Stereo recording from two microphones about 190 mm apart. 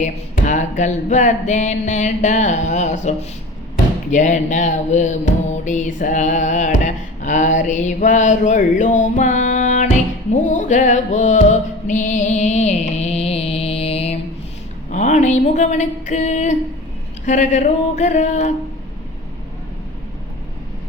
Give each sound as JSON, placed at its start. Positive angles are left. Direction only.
{"t": 0.0, "sound": "music", "side_deg": 40}
{"t": 14.8, "sound": "a sound", "side_deg": 40}
{"t": 17.2, "sound": "music", "side_deg": 40}